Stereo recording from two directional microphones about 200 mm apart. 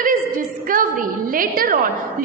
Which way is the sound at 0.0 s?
45° right (ahead or behind).